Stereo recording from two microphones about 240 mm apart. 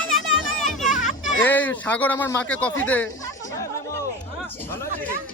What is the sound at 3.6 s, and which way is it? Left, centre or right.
Chatter, centre.